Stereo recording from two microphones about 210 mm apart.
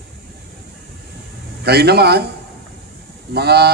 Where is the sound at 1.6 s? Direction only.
50° right (ahead or behind).